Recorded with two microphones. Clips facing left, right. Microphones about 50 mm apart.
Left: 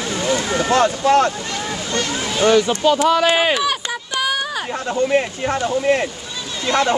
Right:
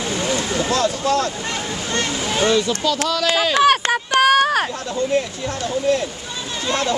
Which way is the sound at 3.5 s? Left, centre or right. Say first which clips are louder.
Right 6 dB; right.